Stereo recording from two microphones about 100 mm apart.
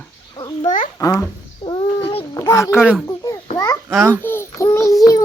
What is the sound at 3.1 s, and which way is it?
Babbling, 30° left (ahead or behind).